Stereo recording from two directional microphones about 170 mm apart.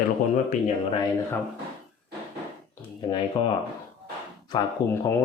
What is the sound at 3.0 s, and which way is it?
Speech, 30° left (ahead or behind).